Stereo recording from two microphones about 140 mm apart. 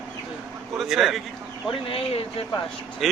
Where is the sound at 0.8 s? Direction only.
Centre (ahead or behind).